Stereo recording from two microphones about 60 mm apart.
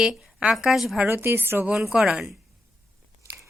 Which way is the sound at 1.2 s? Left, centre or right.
Right.